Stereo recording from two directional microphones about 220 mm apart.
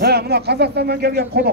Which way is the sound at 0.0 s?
45° right (ahead or behind).